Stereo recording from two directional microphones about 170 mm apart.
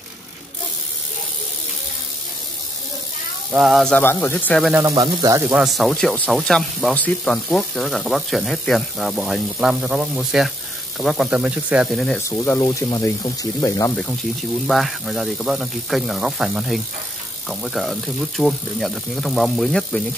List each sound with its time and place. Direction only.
3.5 s speech: centre (ahead or behind)
4.7 s speech: 20° right (ahead or behind)
5.5 s speech: centre (ahead or behind)
12.2 s speech: 15° left (ahead or behind)
13.9 s speech: centre (ahead or behind)